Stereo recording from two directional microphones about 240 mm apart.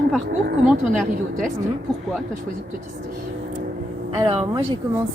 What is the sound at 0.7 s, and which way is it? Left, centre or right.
Speech, centre.